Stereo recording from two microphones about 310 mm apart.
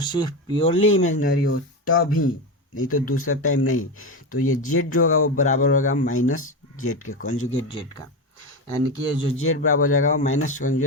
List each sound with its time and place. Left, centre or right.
0.0 s speech: centre
1.4 s speech: left
5.4 s speech: left
6.1 s speech: left
7.7 s speech: centre
9.4 s speech: left
10.1 s speech: left